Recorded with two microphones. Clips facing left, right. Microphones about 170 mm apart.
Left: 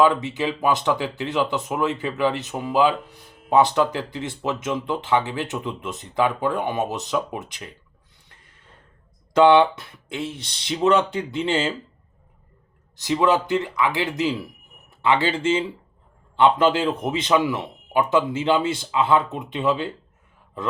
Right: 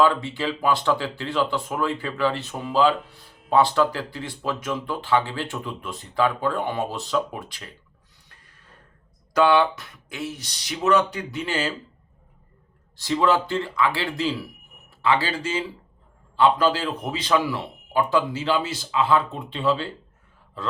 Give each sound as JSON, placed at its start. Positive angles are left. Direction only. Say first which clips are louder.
{"t": 0.0, "sound": "speech", "louder": "left 2 dB", "side_deg": 20}
{"t": 8.3, "sound": "a sound", "louder": "left 1 dB", "side_deg": 25}
{"t": 9.3, "sound": "speech", "louder": "left 4 dB", "side_deg": 25}
{"t": 13.0, "sound": "speech", "louder": "left 1 dB", "side_deg": 20}